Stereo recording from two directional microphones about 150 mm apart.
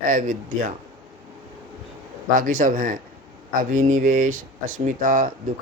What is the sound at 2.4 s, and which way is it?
Speech, 65° right (ahead or behind).